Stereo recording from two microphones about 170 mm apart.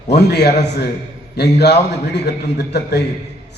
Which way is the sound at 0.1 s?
75° left (ahead or behind).